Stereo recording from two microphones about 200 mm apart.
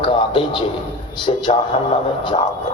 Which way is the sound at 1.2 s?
25° left (ahead or behind).